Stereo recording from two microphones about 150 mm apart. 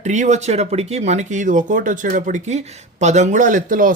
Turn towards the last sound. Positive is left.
turn(degrees=-65)  # may be behind; listen again after turning